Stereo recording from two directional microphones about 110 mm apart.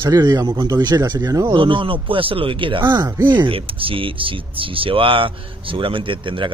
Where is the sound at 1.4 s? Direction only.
50° right (ahead or behind).